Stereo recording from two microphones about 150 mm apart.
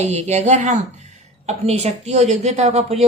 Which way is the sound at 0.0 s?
50° right (ahead or behind).